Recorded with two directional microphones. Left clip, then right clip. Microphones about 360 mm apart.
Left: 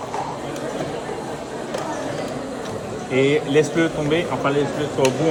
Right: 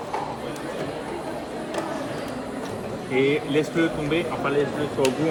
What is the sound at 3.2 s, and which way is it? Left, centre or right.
Speech, left.